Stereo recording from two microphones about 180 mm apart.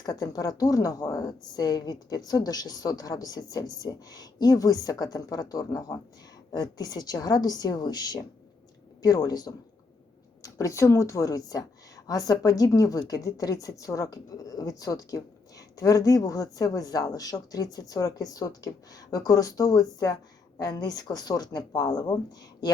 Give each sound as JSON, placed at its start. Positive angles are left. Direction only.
{"t": 0.0, "sound": "a woman's voice", "side_deg": 20}